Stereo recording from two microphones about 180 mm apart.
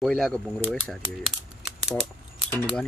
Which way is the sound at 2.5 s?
10° left (ahead or behind).